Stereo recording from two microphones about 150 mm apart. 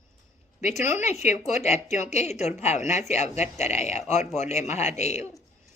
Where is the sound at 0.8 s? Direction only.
15° right (ahead or behind).